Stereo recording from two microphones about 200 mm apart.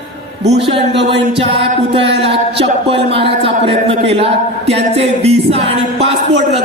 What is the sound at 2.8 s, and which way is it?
Speech, 30° right (ahead or behind).